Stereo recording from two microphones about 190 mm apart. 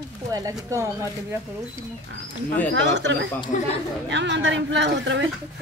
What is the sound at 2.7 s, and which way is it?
Speech, 70° right (ahead or behind).